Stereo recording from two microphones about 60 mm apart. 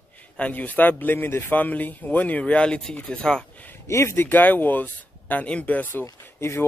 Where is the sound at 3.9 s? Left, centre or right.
Left.